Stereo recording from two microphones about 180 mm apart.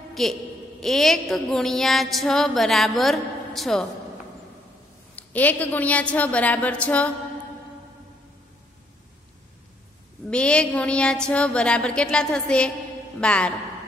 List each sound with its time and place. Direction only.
0.1 s a woman's voice: centre (ahead or behind)
5.1 s a woman's voice: 10° left (ahead or behind)
10.3 s a woman's voice: 5° left (ahead or behind)